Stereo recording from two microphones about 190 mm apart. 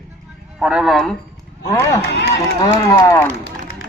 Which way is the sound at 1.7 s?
15° left (ahead or behind).